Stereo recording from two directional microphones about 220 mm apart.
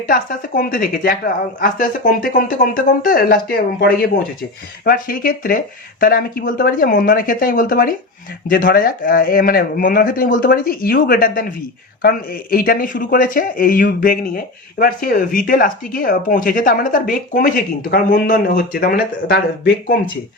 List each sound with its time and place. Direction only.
0.1 s speech: 40° left (ahead or behind)